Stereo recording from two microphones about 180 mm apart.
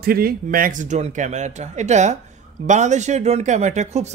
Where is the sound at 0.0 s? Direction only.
55° right (ahead or behind).